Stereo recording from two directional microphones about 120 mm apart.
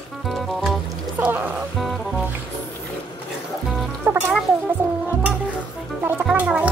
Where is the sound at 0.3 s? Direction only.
Centre (ahead or behind).